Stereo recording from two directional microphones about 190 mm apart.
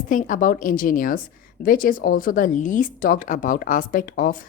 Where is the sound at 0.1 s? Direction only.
45° left (ahead or behind).